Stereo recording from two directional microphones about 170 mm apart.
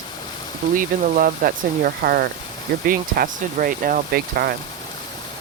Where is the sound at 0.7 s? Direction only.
55° right (ahead or behind).